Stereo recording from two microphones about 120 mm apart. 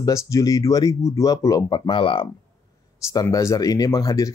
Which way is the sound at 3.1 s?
30° left (ahead or behind).